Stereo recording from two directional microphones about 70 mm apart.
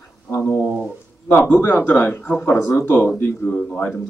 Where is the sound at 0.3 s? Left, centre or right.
Left.